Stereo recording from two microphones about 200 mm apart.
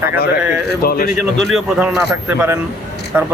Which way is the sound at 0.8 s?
45° left (ahead or behind).